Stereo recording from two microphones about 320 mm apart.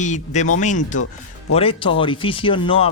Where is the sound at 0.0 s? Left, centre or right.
Left.